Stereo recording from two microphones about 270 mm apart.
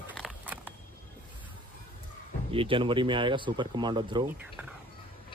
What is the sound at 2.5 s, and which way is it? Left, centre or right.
Speech, centre.